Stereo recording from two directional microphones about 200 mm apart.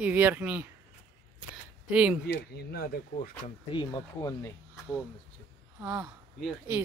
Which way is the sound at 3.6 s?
25° left (ahead or behind).